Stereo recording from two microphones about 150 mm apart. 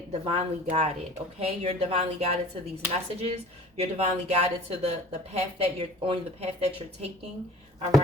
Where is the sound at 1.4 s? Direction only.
40° right (ahead or behind).